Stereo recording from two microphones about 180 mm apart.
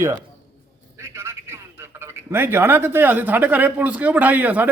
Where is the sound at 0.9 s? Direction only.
15° right (ahead or behind).